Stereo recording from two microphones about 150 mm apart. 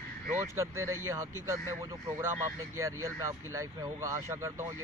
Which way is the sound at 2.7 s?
20° right (ahead or behind).